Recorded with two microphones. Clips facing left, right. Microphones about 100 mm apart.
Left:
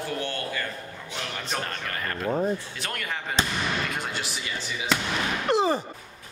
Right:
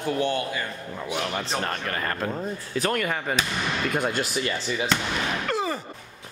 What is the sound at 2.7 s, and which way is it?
Speech, 40° right (ahead or behind).